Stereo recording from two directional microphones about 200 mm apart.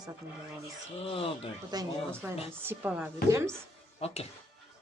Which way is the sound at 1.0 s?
25° left (ahead or behind).